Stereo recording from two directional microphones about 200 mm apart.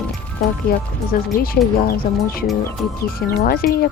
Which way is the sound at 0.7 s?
50° left (ahead or behind).